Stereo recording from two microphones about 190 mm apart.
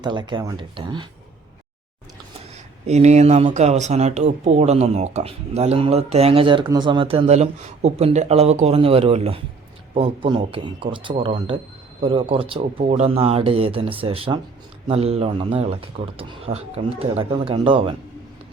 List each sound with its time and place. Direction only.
0.0 s speech: 25° right (ahead or behind)
2.8 s speech: 35° right (ahead or behind)